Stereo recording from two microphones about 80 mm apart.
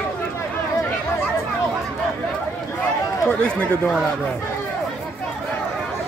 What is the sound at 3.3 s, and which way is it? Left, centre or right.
Speech, centre.